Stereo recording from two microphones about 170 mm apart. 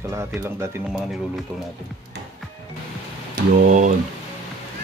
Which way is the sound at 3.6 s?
45° right (ahead or behind).